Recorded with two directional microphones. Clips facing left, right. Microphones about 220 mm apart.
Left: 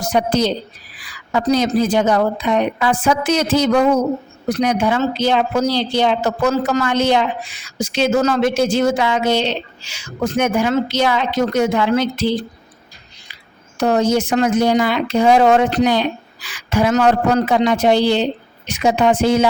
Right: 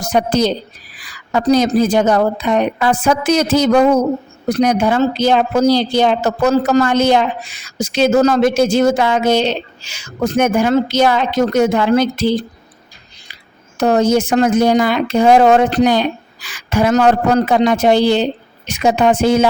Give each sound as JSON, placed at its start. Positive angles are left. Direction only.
{"t": 0.1, "sound": "speech", "side_deg": -45}
{"t": 13.7, "sound": "speech", "side_deg": -45}